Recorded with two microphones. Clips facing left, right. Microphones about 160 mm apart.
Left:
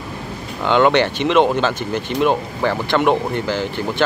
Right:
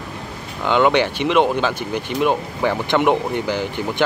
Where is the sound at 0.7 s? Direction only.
5° right (ahead or behind).